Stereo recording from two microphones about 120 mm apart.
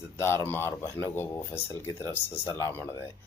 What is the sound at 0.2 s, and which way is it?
A man's voice, 20° left (ahead or behind).